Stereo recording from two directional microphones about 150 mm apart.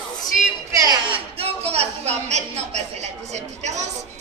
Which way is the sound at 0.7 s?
25° right (ahead or behind).